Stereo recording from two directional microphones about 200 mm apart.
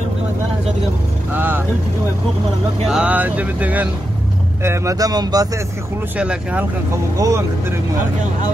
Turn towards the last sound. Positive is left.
turn(degrees=-15)  # may be behind; listen again after turning